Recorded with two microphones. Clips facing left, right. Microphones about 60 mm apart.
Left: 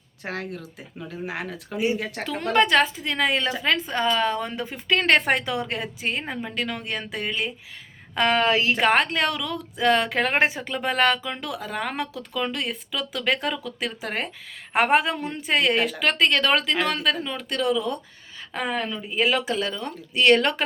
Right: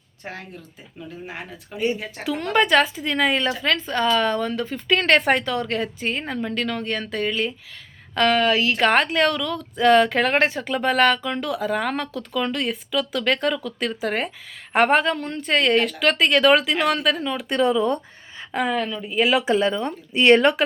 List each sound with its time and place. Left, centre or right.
0.3 s speech: left
2.2 s speech: centre
3.7 s a woman's voice: centre
4.4 s a woman's voice: centre
4.9 s a woman's voice: centre
8.4 s a woman's voice: left
8.8 s speech: centre
17.5 s speech: right
18.5 s speech: centre
19.5 s speech: right